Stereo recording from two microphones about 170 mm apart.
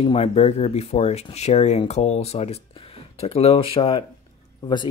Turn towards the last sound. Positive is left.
turn(degrees=25)  # may be behind; listen again after turning